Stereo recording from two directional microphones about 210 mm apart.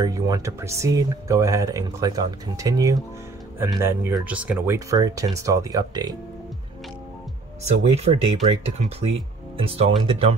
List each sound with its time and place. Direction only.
0.0 s speech: 15° right (ahead or behind)
7.6 s speech: 30° right (ahead or behind)